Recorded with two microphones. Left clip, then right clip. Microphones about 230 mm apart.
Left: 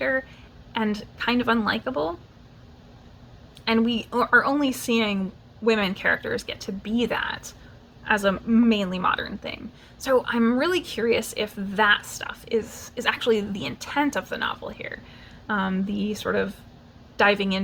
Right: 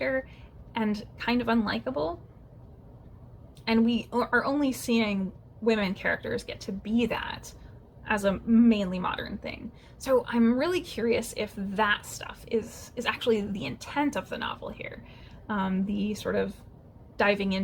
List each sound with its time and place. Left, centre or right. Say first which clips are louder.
0.0 s a woman's voice: left 4 dB; left
3.6 s a woman's voice: left 3 dB; left